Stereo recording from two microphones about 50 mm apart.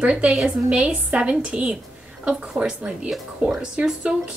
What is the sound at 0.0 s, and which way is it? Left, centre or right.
A woman's voice, right.